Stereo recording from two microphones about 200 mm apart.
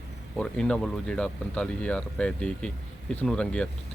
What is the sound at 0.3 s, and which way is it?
Speech, 5° left (ahead or behind).